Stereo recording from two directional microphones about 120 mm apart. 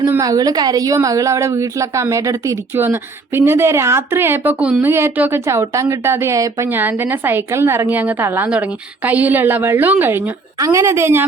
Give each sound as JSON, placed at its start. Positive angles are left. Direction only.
{"t": 0.0, "sound": "a woman's voice", "side_deg": -30}